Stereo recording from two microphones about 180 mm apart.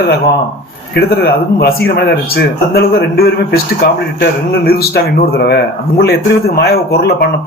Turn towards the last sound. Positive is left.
turn(degrees=60)  # may be behind; listen again after turning